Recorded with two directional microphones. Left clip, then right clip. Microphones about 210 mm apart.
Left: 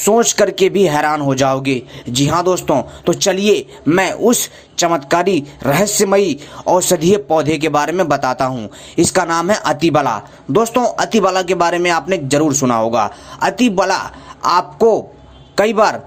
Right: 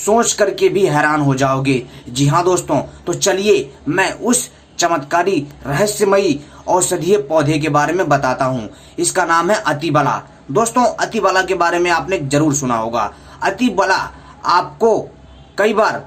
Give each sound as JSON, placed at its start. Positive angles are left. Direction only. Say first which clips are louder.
{"t": 0.0, "sound": "speech", "louder": "left 2 dB", "side_deg": 35}